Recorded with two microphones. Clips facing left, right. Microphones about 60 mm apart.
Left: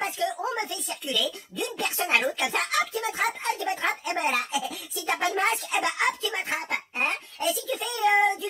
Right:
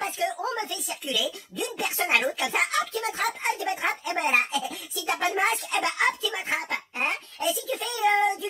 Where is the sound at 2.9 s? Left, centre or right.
Centre.